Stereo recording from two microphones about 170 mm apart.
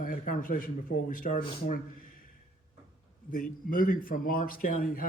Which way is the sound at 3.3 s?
55° left (ahead or behind).